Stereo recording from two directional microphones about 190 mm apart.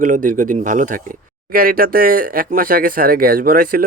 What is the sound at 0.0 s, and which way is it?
Speech, 45° right (ahead or behind).